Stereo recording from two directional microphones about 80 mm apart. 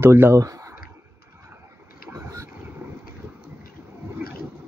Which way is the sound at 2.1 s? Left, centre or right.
Right.